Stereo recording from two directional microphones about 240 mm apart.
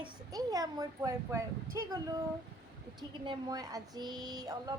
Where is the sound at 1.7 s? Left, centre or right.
Centre.